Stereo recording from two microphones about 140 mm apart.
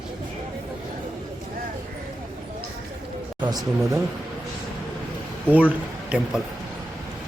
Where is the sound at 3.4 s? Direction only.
30° right (ahead or behind).